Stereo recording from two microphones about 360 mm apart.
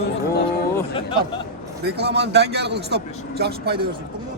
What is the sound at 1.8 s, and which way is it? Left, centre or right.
A man's voice, right.